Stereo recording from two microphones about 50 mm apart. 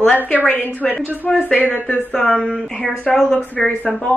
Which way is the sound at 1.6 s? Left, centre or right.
Right.